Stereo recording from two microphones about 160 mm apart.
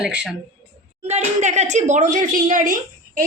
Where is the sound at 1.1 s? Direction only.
45° right (ahead or behind).